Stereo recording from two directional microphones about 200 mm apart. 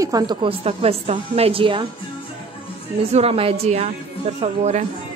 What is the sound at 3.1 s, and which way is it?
Speech, 30° right (ahead or behind).